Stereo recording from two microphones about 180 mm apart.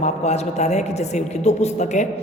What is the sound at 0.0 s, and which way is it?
A man's voice, 35° left (ahead or behind).